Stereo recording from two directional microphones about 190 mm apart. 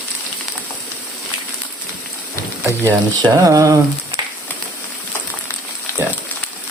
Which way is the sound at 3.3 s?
15° right (ahead or behind).